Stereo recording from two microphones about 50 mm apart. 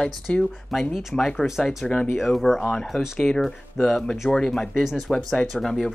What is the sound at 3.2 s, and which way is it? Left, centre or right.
Speech, centre.